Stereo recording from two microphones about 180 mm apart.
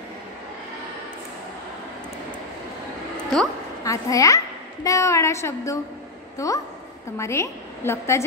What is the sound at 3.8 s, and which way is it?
A child's voice, 20° left (ahead or behind).